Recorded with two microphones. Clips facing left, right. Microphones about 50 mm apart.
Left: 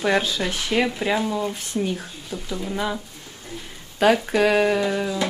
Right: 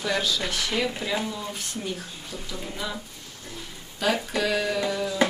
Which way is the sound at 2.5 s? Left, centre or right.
Left.